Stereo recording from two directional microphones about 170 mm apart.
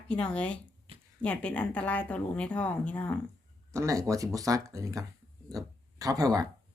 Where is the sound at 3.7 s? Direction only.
20° right (ahead or behind).